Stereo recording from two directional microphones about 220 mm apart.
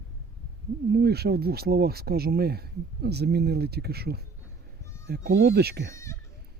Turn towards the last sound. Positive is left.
turn(degrees=15)  # may be behind; listen again after turning